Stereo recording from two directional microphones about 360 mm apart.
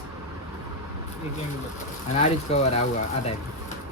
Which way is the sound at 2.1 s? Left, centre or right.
Centre.